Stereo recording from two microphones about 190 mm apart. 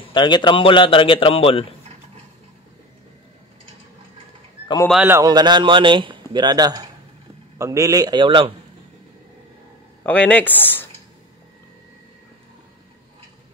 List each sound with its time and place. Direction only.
0.1 s a man's voice: 25° left (ahead or behind)
4.8 s a man's voice: 5° right (ahead or behind)
5.1 s a man's voice: 20° right (ahead or behind)
10.0 s speech: 10° left (ahead or behind)